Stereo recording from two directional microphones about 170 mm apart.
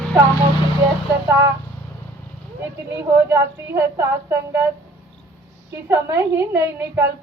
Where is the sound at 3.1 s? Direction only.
15° right (ahead or behind).